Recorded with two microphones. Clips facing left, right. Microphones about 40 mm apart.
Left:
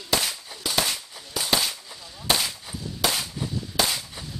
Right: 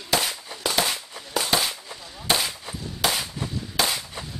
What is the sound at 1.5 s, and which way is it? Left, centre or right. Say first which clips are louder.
Gunshot: left 3 dB; centre.